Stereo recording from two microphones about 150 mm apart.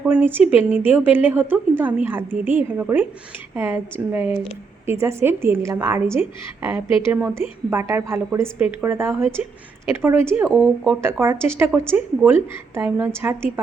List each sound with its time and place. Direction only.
0.0 s speech: 10° right (ahead or behind)